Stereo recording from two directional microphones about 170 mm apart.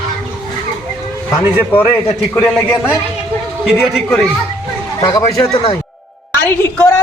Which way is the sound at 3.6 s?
Centre (ahead or behind).